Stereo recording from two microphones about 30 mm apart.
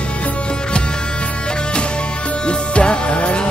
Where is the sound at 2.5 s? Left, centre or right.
Left.